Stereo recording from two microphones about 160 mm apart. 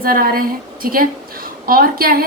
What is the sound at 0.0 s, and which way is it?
A woman's voice, 65° right (ahead or behind).